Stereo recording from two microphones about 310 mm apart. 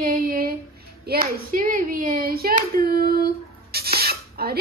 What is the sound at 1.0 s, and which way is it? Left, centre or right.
Hands, right.